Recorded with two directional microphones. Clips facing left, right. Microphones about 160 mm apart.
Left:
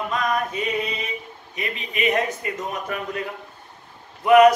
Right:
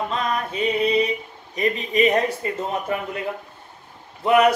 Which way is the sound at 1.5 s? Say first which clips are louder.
Right 8 dB; 40° right (ahead or behind).